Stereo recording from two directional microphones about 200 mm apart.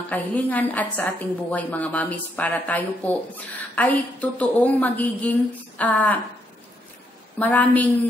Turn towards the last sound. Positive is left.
turn(degrees=10)  # may be behind; listen again after turning